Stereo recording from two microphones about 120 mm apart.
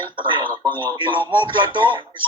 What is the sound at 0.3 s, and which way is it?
Speech, 40° right (ahead or behind).